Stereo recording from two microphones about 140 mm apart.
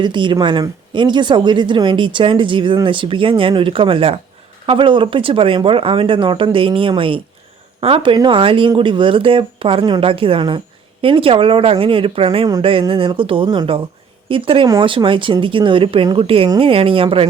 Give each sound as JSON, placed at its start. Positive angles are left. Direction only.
{"t": 0.0, "sound": "speech", "side_deg": -35}